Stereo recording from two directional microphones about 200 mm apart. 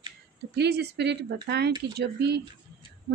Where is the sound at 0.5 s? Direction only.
55° right (ahead or behind).